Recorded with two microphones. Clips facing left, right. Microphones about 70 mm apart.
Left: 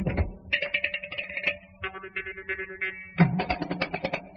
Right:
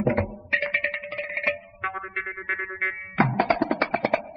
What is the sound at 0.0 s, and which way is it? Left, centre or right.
Music, right.